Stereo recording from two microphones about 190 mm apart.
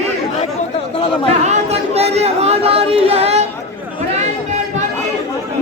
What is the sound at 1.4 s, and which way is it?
Speech, 35° right (ahead or behind).